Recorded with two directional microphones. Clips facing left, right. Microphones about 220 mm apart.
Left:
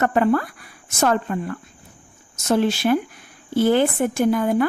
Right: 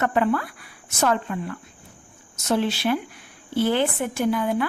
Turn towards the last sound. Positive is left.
turn(degrees=45)  # may be behind; listen again after turning